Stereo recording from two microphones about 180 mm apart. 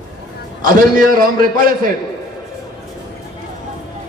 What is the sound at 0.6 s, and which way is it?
Speech, 50° right (ahead or behind).